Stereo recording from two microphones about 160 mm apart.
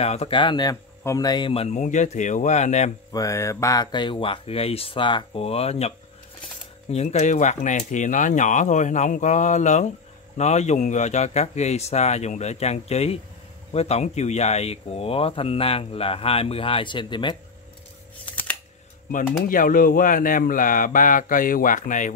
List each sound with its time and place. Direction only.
0.0 s speech: 40° left (ahead or behind)
0.4 s speech: 30° left (ahead or behind)
1.5 s speech: 35° left (ahead or behind)
1.8 s speech: 50° left (ahead or behind)
3.1 s speech: 20° left (ahead or behind)
18.3 s a sound: 10° left (ahead or behind)
19.4 s speech: 60° left (ahead or behind)